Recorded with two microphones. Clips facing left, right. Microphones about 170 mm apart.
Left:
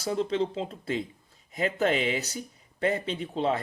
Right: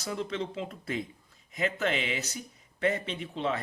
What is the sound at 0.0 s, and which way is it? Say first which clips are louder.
Speech: left 6 dB; 30° left (ahead or behind).